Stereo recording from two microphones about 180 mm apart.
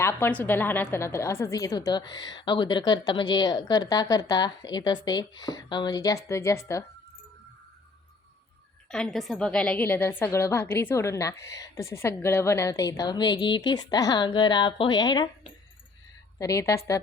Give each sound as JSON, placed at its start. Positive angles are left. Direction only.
{"t": 0.0, "sound": "a woman's voice", "side_deg": 15}
{"t": 8.9, "sound": "a woman's voice", "side_deg": 5}
{"t": 16.4, "sound": "a woman's voice", "side_deg": 15}